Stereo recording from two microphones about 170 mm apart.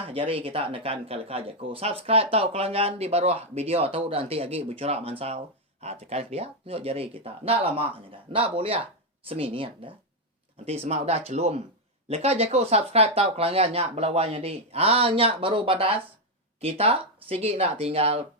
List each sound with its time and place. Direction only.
0.0 s speech: 35° right (ahead or behind)